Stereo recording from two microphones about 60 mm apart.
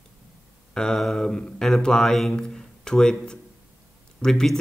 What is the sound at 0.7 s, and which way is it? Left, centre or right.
Speech, centre.